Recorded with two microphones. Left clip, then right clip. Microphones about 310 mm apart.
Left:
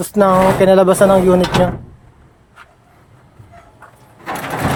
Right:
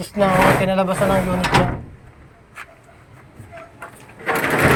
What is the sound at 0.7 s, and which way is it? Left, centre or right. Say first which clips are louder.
Speech: left 9 dB; left.